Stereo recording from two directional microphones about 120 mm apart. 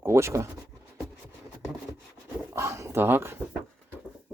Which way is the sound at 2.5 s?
25° right (ahead or behind).